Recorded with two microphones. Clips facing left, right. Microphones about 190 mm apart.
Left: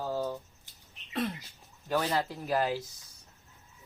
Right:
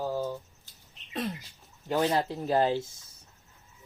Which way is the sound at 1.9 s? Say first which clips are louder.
Right 3 dB; 25° right (ahead or behind).